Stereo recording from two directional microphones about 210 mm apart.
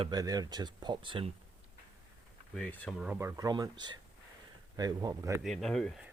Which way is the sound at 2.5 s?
5° left (ahead or behind).